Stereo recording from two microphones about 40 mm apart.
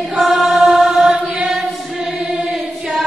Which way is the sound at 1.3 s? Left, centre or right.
Centre.